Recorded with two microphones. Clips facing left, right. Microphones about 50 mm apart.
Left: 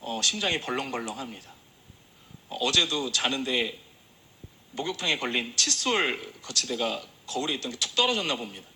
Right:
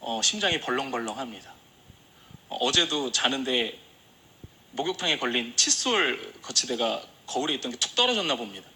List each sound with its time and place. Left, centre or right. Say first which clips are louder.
0.0 s speech: right 2 dB; right